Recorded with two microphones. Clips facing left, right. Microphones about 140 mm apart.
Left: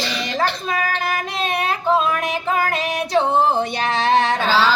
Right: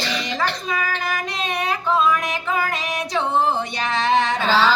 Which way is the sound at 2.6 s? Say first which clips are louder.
Left 3 dB; 55° left (ahead or behind).